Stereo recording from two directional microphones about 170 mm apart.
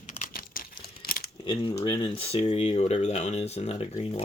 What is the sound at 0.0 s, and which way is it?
Crumpling, 50° left (ahead or behind).